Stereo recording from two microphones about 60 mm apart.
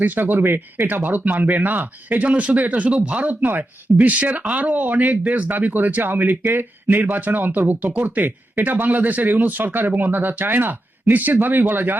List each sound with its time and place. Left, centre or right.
0.0 s speech: right